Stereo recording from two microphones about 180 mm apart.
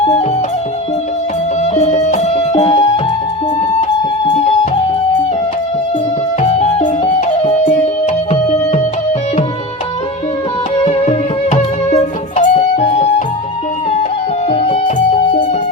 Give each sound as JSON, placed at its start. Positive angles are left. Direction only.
{"t": 0.0, "sound": "music", "side_deg": 35}
{"t": 1.6, "sound": "music", "side_deg": 40}
{"t": 6.4, "sound": "music", "side_deg": 35}
{"t": 10.8, "sound": "music", "side_deg": 35}
{"t": 14.5, "sound": "music", "side_deg": 35}